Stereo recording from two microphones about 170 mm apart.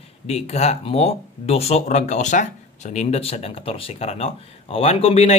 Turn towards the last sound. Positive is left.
turn(degrees=35)  # may be behind; listen again after turning